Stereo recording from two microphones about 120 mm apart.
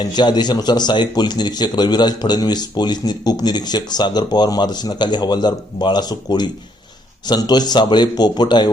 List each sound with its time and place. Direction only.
0.0 s speech: 35° left (ahead or behind)